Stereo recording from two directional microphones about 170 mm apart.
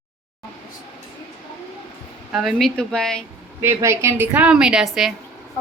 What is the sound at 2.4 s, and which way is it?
Speech, 5° left (ahead or behind).